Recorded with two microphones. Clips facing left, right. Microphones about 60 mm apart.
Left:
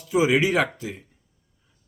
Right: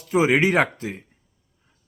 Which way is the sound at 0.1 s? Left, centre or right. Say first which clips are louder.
Right 2 dB; right.